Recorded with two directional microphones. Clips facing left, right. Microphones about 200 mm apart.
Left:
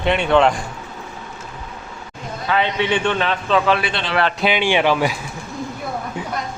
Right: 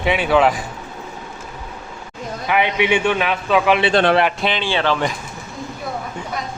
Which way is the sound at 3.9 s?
50° right (ahead or behind).